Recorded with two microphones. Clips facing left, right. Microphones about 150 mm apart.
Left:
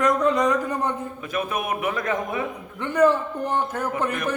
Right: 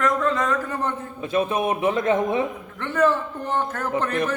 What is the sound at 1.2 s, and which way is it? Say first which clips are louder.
A man's voice: right 5 dB; 25° right (ahead or behind).